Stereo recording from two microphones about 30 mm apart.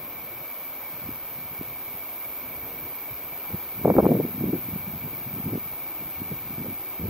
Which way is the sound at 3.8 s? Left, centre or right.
Right.